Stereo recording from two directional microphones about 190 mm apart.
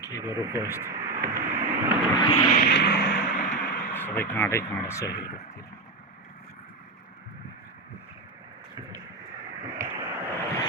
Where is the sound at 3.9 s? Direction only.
10° left (ahead or behind).